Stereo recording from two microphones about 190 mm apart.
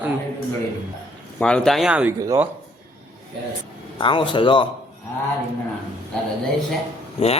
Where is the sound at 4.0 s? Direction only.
25° left (ahead or behind).